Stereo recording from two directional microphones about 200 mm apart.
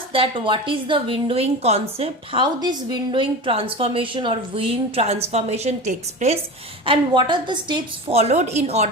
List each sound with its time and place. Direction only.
0.1 s a woman's voice: 25° right (ahead or behind)
6.8 s a woman's voice: 25° right (ahead or behind)